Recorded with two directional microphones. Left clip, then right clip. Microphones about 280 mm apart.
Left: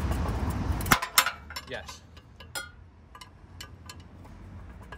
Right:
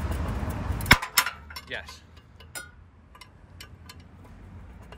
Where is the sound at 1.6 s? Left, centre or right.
Centre.